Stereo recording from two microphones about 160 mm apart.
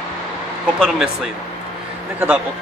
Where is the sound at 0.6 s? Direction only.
5° right (ahead or behind).